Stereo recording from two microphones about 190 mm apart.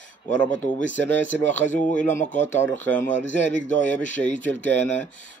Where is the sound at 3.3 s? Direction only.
40° left (ahead or behind).